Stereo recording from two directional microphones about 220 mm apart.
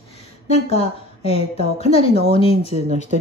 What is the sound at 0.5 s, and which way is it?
A woman's voice, 25° left (ahead or behind).